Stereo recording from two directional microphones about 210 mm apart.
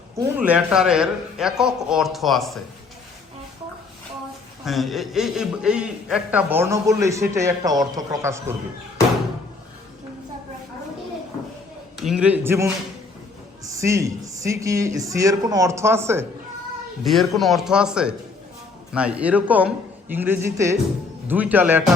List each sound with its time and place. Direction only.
0.2 s a man's voice: 5° right (ahead or behind)
4.6 s a man's voice: centre (ahead or behind)
11.9 s a man's voice: centre (ahead or behind)
17.0 s a man's voice: centre (ahead or behind)